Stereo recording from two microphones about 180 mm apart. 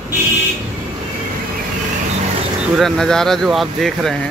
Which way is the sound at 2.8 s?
Centre (ahead or behind).